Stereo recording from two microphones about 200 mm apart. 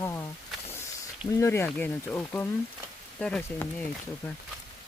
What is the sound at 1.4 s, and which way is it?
Speech, 10° left (ahead or behind).